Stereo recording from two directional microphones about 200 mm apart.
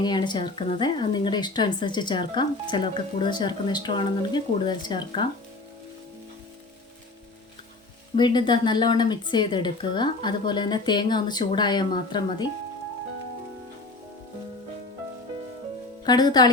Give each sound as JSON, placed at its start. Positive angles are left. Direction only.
{"t": 0.0, "sound": "speech", "side_deg": 20}
{"t": 8.1, "sound": "speech", "side_deg": 20}
{"t": 16.0, "sound": "speech", "side_deg": 20}